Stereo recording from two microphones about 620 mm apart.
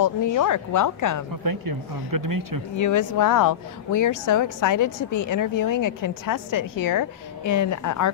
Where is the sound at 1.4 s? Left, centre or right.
Right.